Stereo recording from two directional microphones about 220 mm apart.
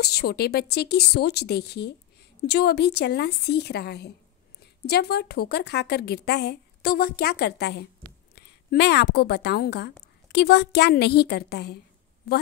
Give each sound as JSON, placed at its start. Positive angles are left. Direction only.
{"t": 0.0, "sound": "a woman's voice", "side_deg": 45}